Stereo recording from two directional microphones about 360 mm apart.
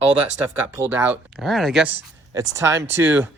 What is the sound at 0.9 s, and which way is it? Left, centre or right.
Speech, centre.